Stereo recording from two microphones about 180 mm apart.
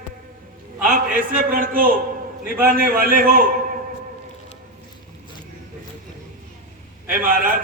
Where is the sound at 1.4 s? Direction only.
50° right (ahead or behind).